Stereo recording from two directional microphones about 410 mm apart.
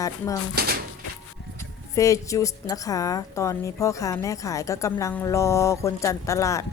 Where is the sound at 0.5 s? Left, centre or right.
Right.